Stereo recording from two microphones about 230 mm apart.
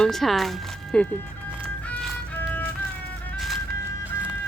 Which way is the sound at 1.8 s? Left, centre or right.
Centre.